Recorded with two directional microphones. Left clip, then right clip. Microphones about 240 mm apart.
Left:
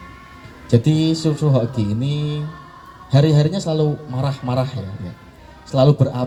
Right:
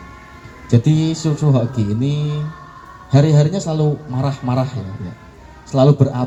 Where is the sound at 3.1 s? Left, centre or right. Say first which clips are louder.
Right 1 dB; left.